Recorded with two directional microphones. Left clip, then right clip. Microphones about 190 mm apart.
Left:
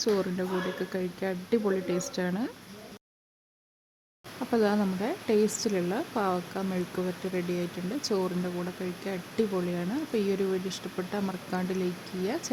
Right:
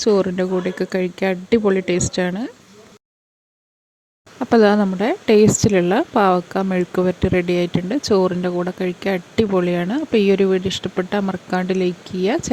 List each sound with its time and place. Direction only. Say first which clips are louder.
0.1 s speech: right 13 dB; 35° right (ahead or behind)
4.4 s speech: right 13 dB; 40° right (ahead or behind)